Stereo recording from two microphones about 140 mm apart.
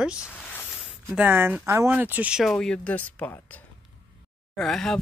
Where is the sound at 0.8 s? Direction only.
5° right (ahead or behind).